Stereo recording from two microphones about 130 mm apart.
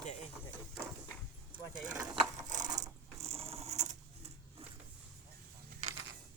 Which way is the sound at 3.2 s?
50° right (ahead or behind).